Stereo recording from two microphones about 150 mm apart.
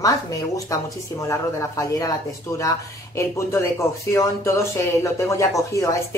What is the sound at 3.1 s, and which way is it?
Speech, 20° left (ahead or behind).